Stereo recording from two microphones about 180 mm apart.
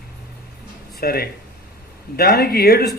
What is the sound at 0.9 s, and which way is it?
A man's voice, 60° left (ahead or behind).